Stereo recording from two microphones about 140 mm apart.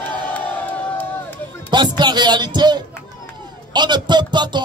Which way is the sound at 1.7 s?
30° right (ahead or behind).